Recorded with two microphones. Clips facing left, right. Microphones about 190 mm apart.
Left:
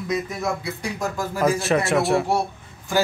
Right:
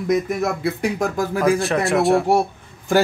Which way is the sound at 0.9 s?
55° right (ahead or behind).